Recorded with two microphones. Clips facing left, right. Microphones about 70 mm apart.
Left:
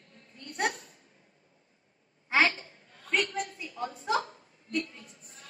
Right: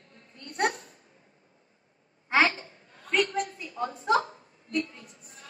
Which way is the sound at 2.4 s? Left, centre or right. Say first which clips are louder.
Right 2 dB; right.